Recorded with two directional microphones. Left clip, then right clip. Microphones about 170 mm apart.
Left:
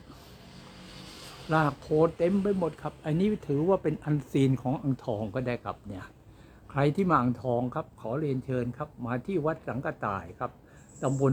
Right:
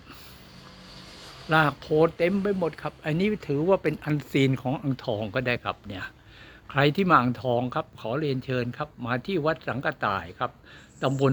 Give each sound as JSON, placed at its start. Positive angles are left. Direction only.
{"t": 1.5, "sound": "a man's voice", "side_deg": -15}